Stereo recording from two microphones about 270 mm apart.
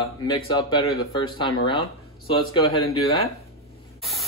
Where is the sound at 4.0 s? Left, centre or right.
Centre.